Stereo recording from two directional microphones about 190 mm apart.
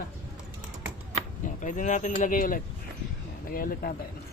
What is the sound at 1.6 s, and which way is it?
Speech, 40° left (ahead or behind).